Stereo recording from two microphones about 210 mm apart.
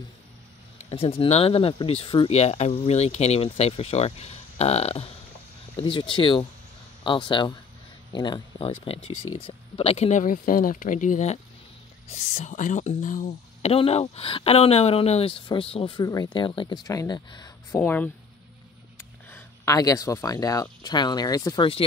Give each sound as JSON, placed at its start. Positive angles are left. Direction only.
{"t": 0.8, "sound": "speech", "side_deg": 25}
{"t": 9.0, "sound": "speech", "side_deg": 90}
{"t": 9.4, "sound": "speech", "side_deg": 25}
{"t": 17.7, "sound": "speech", "side_deg": 10}
{"t": 19.2, "sound": "speech", "side_deg": 10}